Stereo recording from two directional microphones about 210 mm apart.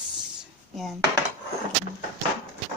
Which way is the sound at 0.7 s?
Centre (ahead or behind).